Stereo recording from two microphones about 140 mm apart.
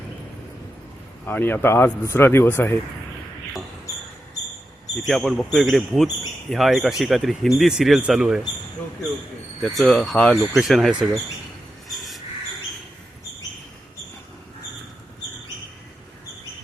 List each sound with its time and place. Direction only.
1.3 s speech: 15° left (ahead or behind)
5.0 s speech: centre (ahead or behind)
9.6 s speech: centre (ahead or behind)
11.9 s a sound: centre (ahead or behind)